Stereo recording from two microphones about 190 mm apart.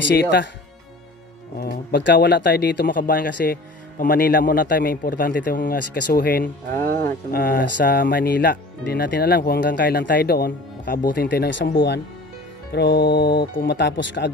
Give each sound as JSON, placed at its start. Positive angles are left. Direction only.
{"t": 0.1, "sound": "speech", "side_deg": 65}
{"t": 1.6, "sound": "speech", "side_deg": 55}
{"t": 3.0, "sound": "speech", "side_deg": 50}
{"t": 12.7, "sound": "speech", "side_deg": 60}